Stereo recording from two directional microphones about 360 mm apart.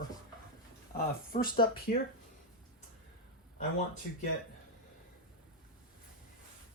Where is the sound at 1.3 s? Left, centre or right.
Left.